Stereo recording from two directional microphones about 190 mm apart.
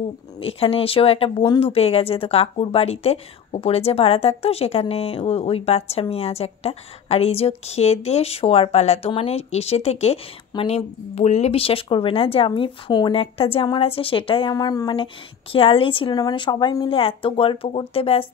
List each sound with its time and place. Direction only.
0.4 s a woman's voice: 30° left (ahead or behind)